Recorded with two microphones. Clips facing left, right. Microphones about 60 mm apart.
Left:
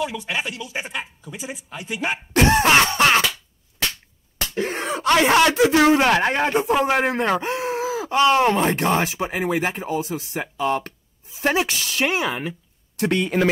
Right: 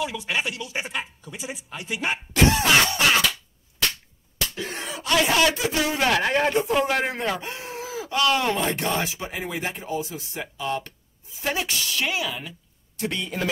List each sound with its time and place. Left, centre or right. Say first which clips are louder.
0.0 s speech: left 1 dB; centre
2.3 s speech: left 4 dB; left
4.6 s wail: left 13 dB; left
5.1 s speech: left 4 dB; left
5.6 s a man's voice: left 10 dB; left
5.9 s speech: left 3 dB; left
7.1 s speech: left 6 dB; left
7.4 s groan: left 10 dB; left
8.1 s speech: left 5 dB; left
12.9 s a man's voice: left 8 dB; left